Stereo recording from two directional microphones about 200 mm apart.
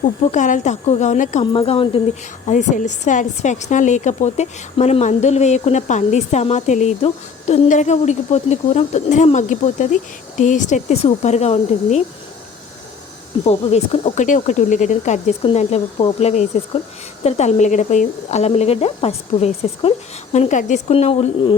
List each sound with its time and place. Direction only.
0.0 s a woman's voice: 40° left (ahead or behind)
13.5 s a woman's voice: 30° left (ahead or behind)